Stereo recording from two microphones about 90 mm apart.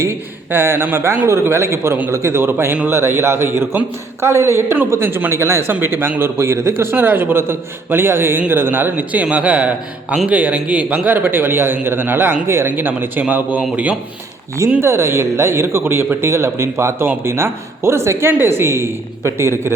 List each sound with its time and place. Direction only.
0.0 s speech: 30° right (ahead or behind)
14.8 s a man's voice: 30° right (ahead or behind)